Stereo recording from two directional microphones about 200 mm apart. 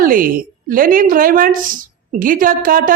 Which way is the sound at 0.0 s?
45° right (ahead or behind).